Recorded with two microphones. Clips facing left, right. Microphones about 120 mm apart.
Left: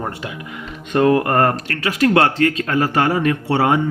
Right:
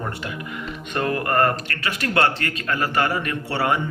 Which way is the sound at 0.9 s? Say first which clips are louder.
Left 7 dB; 90° left.